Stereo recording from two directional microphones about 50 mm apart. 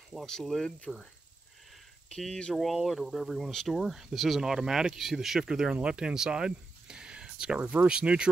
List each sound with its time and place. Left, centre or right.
0.3 s speech: centre
2.0 s speech: centre
2.5 s speech: centre